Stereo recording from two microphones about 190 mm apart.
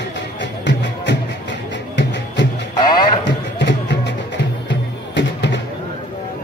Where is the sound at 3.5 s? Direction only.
65° left (ahead or behind).